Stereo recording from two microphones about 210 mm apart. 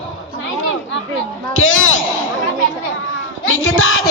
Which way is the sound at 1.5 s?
70° left (ahead or behind).